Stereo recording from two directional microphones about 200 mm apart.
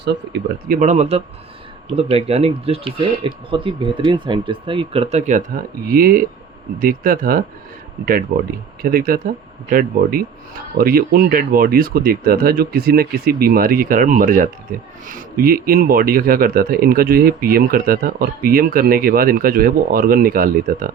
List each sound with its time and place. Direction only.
0.0 s speech: 55° right (ahead or behind)
0.8 s speech: 35° right (ahead or behind)
5.9 s speech: 45° right (ahead or behind)